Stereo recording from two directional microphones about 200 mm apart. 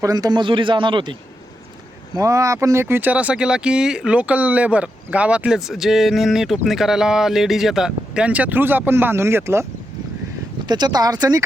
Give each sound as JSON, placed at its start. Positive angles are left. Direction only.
{"t": 0.0, "sound": "a man's voice", "side_deg": -20}
{"t": 2.1, "sound": "speech", "side_deg": -15}
{"t": 10.7, "sound": "a man's voice", "side_deg": -20}